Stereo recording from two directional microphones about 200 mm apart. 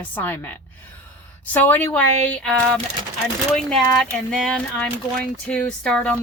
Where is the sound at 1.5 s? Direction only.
10° left (ahead or behind).